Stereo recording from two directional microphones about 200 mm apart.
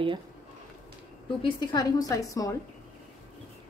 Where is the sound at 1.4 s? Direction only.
25° left (ahead or behind).